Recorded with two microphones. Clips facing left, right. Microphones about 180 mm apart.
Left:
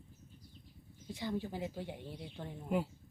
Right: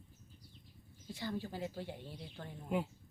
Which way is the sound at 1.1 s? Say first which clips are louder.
Left 2 dB; 20° left (ahead or behind).